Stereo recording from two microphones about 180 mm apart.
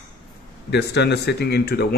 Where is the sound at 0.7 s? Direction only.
70° left (ahead or behind).